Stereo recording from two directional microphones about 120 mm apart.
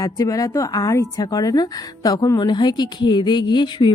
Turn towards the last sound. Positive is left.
turn(degrees=40)  # may be behind; listen again after turning